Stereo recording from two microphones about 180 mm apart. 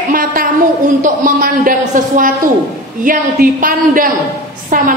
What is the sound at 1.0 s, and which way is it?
A woman's voice, 45° right (ahead or behind).